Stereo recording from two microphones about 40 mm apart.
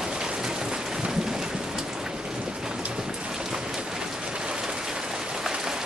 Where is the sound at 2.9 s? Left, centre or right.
Centre.